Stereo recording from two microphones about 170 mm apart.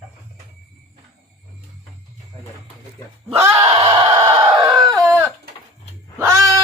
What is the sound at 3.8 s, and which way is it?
Chicken, 30° right (ahead or behind).